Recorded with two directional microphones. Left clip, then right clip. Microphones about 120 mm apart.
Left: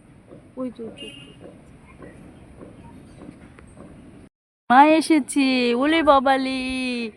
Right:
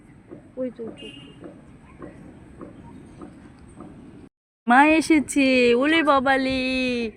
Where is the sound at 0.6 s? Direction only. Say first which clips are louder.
Right 2 dB; 35° left (ahead or behind).